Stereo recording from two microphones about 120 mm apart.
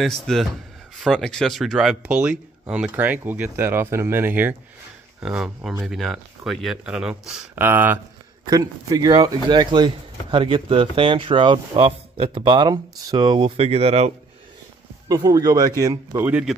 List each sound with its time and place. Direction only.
0.0 s speech: centre (ahead or behind); by 4.6 s 15° right (ahead or behind)
5.2 s speech: 5° right (ahead or behind)
7.5 s speech: 20° right (ahead or behind)
8.5 s speech: 30° right (ahead or behind)
13.6 s speech: 55° right (ahead or behind)
15.0 s speech: 30° right (ahead or behind)
16.2 s speech: 15° right (ahead or behind)